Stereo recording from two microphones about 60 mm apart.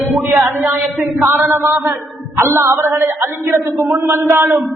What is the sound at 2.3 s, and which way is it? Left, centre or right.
Speech, right.